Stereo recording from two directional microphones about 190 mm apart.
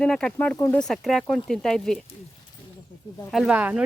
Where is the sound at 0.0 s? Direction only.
5° left (ahead or behind).